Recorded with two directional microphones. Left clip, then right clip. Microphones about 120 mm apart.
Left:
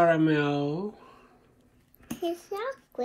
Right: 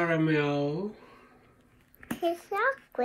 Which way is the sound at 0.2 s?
10° left (ahead or behind).